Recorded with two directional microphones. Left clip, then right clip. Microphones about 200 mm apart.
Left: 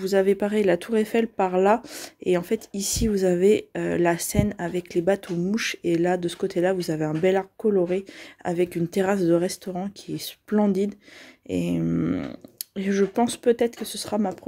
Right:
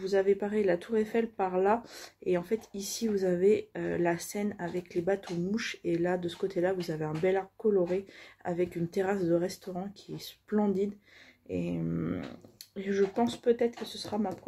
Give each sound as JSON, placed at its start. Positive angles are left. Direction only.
{"t": 0.0, "sound": "speech", "side_deg": 55}